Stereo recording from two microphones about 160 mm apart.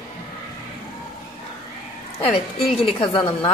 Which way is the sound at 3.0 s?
35° left (ahead or behind).